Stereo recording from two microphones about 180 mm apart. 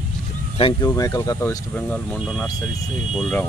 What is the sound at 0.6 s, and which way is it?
Speech, 20° left (ahead or behind).